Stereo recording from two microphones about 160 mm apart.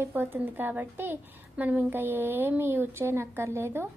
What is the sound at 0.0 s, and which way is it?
A woman's voice, 15° right (ahead or behind).